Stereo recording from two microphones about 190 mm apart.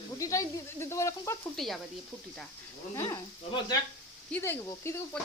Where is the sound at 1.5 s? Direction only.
Centre (ahead or behind).